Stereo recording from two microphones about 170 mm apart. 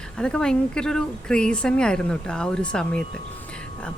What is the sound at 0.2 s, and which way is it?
Speech, 5° left (ahead or behind).